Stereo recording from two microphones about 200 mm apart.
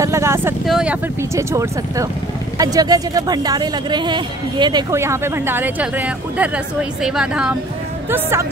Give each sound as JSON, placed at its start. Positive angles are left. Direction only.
{"t": 0.0, "sound": "vehicle", "side_deg": -15}
{"t": 0.7, "sound": "speech", "side_deg": -5}